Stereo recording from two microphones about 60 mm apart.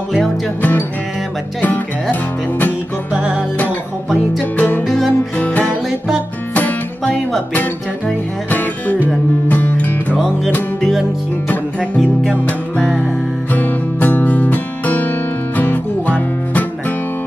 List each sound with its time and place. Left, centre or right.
0.6 s music: left
3.2 s music: centre
4.6 s music: left
4.8 s music: centre
5.4 s music: left
10.8 s music: centre
13.5 s music: left